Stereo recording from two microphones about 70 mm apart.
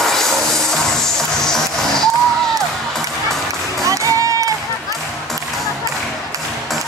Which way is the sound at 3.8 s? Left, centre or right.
Right.